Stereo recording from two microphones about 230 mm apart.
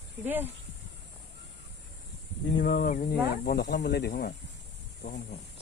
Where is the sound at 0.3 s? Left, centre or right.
Centre.